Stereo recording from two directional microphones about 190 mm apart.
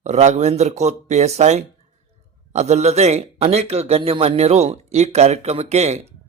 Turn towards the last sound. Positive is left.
turn(degrees=-35)  # may be behind; listen again after turning